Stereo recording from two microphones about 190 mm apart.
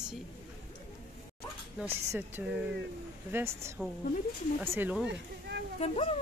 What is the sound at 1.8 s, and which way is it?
Speech, 10° right (ahead or behind).